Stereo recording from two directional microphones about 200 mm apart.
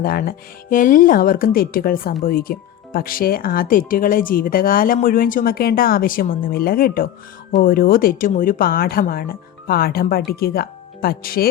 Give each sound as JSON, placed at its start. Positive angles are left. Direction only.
{"t": 0.0, "sound": "speech", "side_deg": 45}